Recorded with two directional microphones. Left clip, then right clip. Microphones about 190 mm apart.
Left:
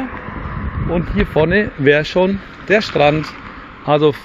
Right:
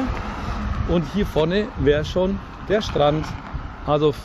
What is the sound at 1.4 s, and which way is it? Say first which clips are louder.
Speech: left 6 dB; 35° left (ahead or behind).